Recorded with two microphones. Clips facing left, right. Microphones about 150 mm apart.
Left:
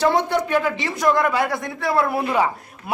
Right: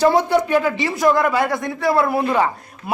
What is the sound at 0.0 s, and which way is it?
A man's voice, 5° right (ahead or behind).